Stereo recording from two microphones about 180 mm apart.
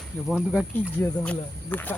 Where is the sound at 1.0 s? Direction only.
10° left (ahead or behind).